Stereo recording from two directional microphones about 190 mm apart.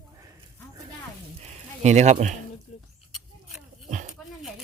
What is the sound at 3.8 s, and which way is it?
Dog, 40° right (ahead or behind).